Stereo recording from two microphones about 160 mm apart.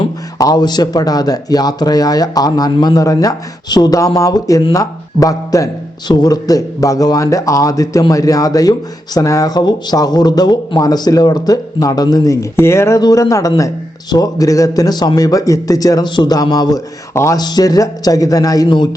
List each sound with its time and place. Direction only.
0.0 s speech: 25° left (ahead or behind)